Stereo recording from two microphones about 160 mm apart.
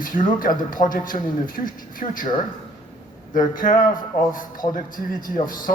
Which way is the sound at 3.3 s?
55° left (ahead or behind).